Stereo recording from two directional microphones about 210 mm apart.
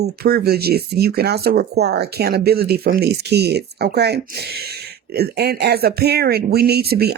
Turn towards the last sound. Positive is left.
turn(degrees=-50)  # may be behind; listen again after turning